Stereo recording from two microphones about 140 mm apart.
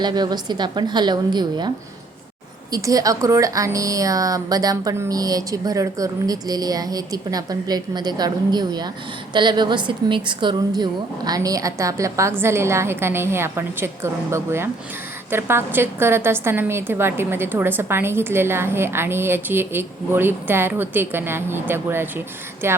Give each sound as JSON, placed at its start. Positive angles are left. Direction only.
{"t": 0.0, "sound": "a woman's voice", "side_deg": -30}
{"t": 2.7, "sound": "a woman's voice", "side_deg": -25}